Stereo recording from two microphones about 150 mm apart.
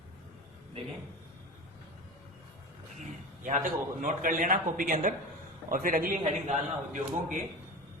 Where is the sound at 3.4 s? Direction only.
60° right (ahead or behind).